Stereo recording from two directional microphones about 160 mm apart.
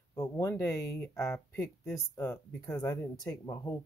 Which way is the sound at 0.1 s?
20° left (ahead or behind).